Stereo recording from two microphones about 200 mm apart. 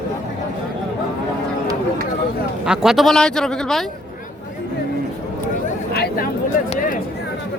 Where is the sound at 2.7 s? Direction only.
Centre (ahead or behind).